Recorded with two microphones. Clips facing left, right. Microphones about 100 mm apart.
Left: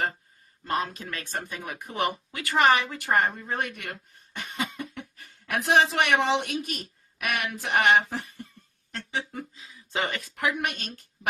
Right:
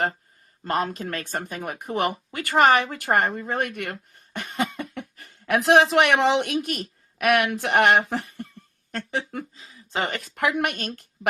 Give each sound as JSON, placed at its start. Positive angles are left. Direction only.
{"t": 0.6, "sound": "speech", "side_deg": -50}
{"t": 8.9, "sound": "speech", "side_deg": -55}
{"t": 9.6, "sound": "speech", "side_deg": -40}
{"t": 10.2, "sound": "a woman's voice", "side_deg": -70}